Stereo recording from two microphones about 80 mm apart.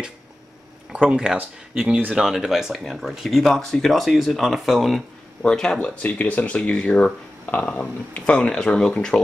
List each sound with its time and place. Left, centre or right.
0.9 s speech: centre
2.1 s speech: centre
5.4 s speech: centre